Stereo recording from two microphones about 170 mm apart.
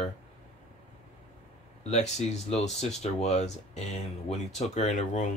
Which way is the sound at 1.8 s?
40° left (ahead or behind).